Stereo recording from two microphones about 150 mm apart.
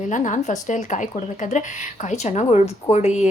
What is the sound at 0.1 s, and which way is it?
A woman's voice, 55° left (ahead or behind).